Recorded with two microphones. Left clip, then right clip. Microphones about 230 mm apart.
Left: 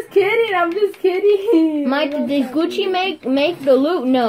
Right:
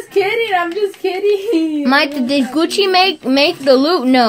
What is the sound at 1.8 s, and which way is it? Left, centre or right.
Speech, right.